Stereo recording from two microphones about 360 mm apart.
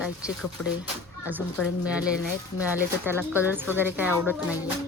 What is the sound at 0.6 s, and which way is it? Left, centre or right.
Speech, left.